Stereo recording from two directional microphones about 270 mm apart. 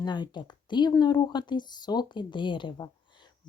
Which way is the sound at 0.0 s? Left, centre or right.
Centre.